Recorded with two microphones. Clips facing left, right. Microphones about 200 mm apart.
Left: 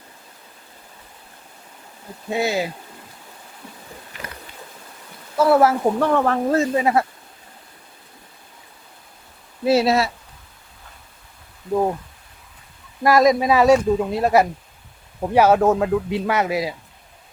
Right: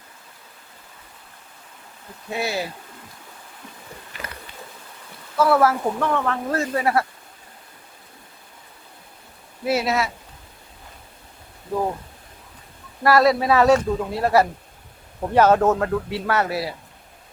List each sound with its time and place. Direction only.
2.3 s speech: 20° left (ahead or behind)
5.4 s speech: 25° left (ahead or behind)
6.5 s speech: 20° left (ahead or behind)
9.6 s speech: 30° left (ahead or behind)
13.0 s speech: 15° left (ahead or behind)